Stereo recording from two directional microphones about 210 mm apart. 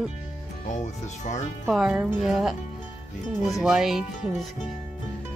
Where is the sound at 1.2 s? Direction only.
35° left (ahead or behind).